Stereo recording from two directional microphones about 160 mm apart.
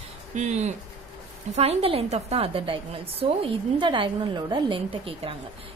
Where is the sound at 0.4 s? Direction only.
45° right (ahead or behind).